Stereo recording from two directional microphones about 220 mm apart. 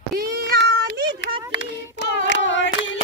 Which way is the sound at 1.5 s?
55° left (ahead or behind).